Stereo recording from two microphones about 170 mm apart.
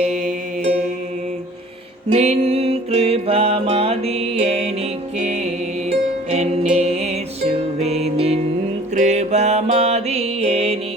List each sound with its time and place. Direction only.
0.0 s music: 40° right (ahead or behind)
2.0 s music: 40° right (ahead or behind)